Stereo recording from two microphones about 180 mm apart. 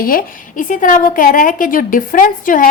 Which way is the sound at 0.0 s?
50° left (ahead or behind).